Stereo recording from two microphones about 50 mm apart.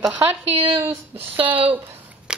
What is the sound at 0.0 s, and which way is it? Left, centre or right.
Speech, right.